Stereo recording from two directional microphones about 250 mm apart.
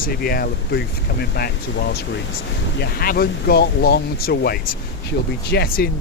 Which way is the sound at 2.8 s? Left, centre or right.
Left.